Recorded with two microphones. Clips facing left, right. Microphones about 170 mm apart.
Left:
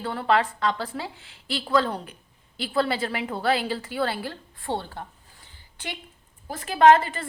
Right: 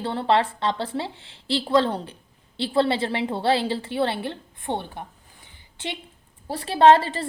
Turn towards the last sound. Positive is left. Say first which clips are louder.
# right 1 dB
turn(degrees=-30)  # may be behind; listen again after turning